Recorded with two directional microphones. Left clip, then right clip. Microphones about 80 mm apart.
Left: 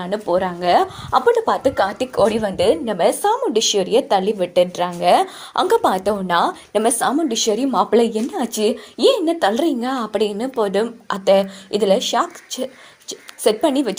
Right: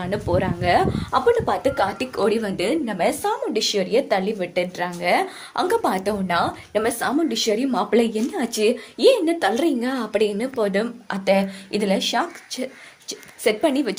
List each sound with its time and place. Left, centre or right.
0.0 s speech: left
1.5 s speech: centre
2.2 s speech: left
3.0 s a woman's voice: left
7.3 s a woman's voice: left
13.4 s a woman's voice: left